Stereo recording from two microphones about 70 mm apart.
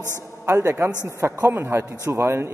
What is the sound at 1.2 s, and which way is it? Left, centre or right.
A man's voice, right.